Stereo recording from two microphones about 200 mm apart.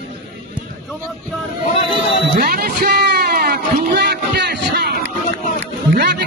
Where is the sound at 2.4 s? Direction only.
50° right (ahead or behind).